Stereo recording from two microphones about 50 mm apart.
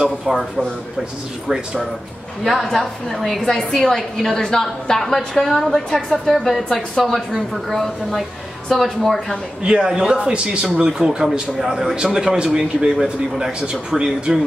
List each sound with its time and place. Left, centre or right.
0.0 s speech: centre
2.4 s a woman's voice: centre
6.3 s speech: centre
9.6 s speech: centre